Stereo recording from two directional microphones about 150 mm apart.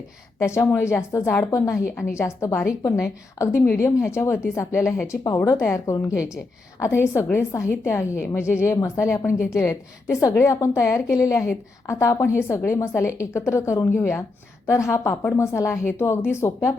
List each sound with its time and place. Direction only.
0.3 s a woman's voice: 20° left (ahead or behind)